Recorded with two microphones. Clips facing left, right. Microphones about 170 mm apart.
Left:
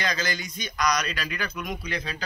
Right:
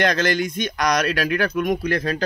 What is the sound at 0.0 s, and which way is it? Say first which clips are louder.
Speech: right 10 dB; 55° right (ahead or behind).